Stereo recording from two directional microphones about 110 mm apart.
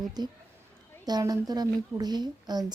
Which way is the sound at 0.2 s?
40° right (ahead or behind).